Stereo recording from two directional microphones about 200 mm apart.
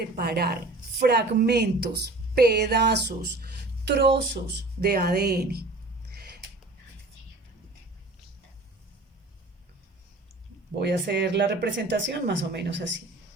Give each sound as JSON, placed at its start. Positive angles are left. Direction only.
{"t": 0.0, "sound": "a woman's voice", "side_deg": -50}
{"t": 10.8, "sound": "speech", "side_deg": -60}